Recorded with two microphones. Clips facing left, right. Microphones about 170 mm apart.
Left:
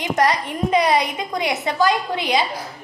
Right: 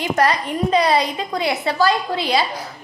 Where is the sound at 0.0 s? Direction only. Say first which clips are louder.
Right 1 dB; 20° left (ahead or behind).